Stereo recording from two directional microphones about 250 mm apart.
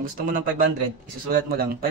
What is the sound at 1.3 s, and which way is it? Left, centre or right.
Speech, right.